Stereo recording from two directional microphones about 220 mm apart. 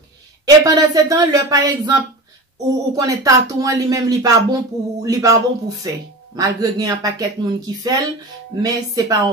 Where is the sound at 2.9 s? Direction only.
15° right (ahead or behind).